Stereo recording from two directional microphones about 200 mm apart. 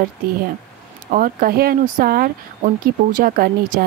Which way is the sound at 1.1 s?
45° right (ahead or behind).